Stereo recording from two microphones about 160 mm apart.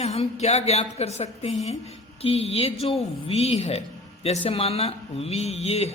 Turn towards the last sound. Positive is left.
turn(degrees=40)  # may be behind; listen again after turning